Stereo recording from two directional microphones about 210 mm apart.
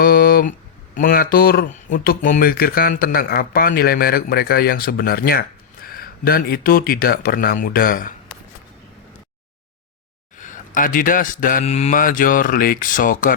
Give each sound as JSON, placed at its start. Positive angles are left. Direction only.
{"t": 0.0, "sound": "a sound", "side_deg": 45}
{"t": 0.9, "sound": "speech", "side_deg": 45}
{"t": 10.3, "sound": "a man's voice", "side_deg": 40}